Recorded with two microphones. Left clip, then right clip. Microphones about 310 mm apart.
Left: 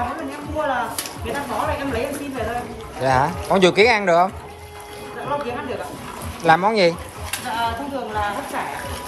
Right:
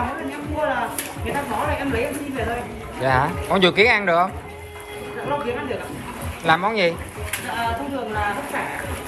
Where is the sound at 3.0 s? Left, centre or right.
Centre.